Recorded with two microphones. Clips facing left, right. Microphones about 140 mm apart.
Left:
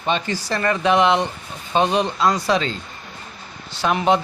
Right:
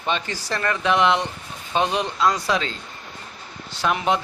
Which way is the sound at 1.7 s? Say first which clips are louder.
Left 4 dB; 35° left (ahead or behind).